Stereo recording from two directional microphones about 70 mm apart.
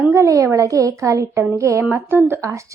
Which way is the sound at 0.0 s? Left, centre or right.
Right.